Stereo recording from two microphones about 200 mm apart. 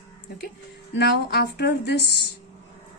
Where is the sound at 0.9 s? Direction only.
55° left (ahead or behind).